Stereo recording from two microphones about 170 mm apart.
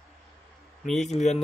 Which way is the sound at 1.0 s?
40° left (ahead or behind).